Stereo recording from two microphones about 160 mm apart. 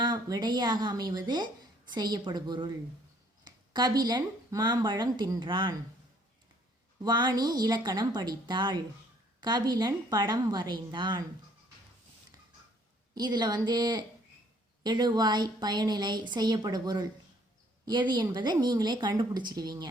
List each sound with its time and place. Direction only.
0.0 s a woman's voice: 25° right (ahead or behind)
7.0 s a woman's voice: 25° right (ahead or behind)
13.1 s a woman's voice: 25° right (ahead or behind)